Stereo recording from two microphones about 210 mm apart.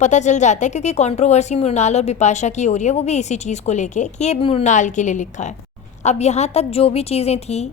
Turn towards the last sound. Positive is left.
turn(degrees=30)  # may be behind; listen again after turning